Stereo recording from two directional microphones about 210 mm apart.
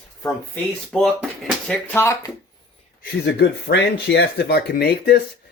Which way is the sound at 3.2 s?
55° left (ahead or behind).